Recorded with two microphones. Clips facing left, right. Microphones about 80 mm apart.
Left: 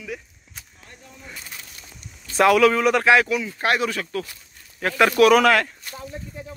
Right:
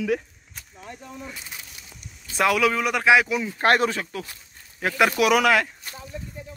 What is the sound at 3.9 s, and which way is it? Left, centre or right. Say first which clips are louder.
Speech: left 3 dB; centre.